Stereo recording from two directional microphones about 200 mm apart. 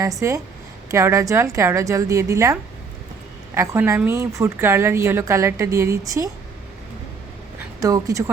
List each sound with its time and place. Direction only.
0.0 s a woman's voice: 15° right (ahead or behind)
7.6 s speech: 15° right (ahead or behind)